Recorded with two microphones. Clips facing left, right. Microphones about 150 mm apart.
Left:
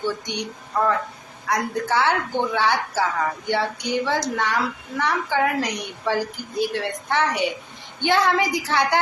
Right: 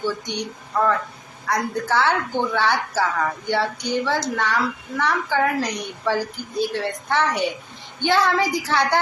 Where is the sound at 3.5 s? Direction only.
15° left (ahead or behind).